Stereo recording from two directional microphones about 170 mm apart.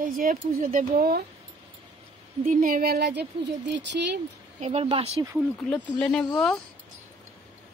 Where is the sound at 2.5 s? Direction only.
55° right (ahead or behind); by 4.1 s 90° right.